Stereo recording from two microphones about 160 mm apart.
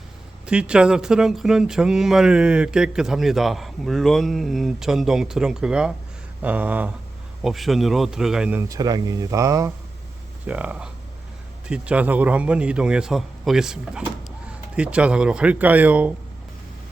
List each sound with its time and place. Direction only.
0.4 s a man's voice: 5° right (ahead or behind)
8.6 s speech: 20° right (ahead or behind)
10.4 s a man's voice: 10° right (ahead or behind)